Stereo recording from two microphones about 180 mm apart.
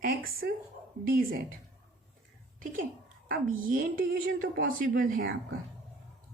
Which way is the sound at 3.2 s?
50° right (ahead or behind).